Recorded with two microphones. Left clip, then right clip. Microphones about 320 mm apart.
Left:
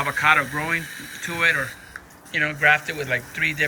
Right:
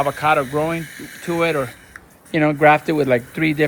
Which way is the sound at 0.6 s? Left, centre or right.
Centre.